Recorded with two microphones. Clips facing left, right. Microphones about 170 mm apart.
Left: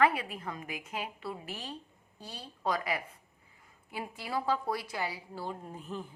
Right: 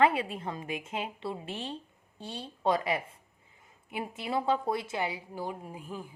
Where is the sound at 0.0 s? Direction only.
25° right (ahead or behind).